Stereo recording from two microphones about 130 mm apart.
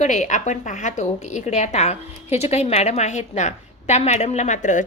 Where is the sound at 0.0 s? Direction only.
65° left (ahead or behind).